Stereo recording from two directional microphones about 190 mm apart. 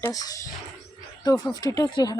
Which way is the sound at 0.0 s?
20° left (ahead or behind).